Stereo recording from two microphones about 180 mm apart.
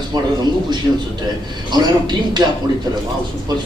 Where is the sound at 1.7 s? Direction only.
25° right (ahead or behind).